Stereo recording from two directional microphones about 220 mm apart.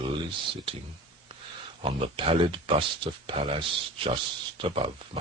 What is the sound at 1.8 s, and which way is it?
Speech, 25° right (ahead or behind).